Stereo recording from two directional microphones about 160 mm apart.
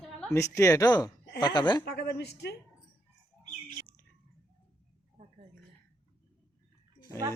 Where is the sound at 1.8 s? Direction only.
90° left.